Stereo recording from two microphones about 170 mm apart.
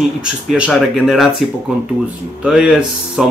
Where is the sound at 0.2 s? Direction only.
5° right (ahead or behind).